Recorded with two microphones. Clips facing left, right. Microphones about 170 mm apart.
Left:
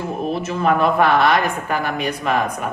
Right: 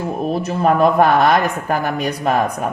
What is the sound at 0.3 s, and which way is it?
Speech, 40° right (ahead or behind).